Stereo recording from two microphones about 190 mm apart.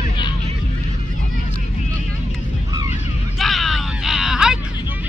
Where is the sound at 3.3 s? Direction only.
Centre (ahead or behind).